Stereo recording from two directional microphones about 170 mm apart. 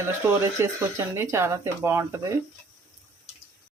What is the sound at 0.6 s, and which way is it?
Speech, 15° right (ahead or behind).